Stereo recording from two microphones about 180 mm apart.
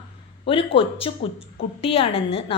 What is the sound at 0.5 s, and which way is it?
A woman's voice, 30° left (ahead or behind).